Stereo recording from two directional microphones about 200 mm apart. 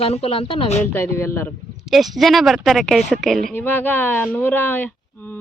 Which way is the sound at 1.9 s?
Centre (ahead or behind).